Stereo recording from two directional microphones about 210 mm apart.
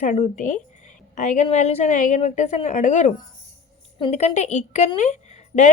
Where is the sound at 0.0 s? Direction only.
35° left (ahead or behind).